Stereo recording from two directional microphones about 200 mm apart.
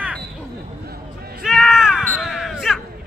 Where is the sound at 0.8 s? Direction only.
50° right (ahead or behind).